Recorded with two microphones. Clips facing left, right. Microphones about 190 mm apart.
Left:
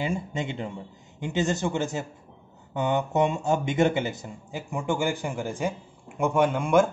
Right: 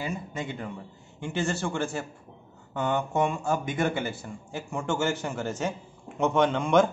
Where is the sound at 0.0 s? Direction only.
25° left (ahead or behind).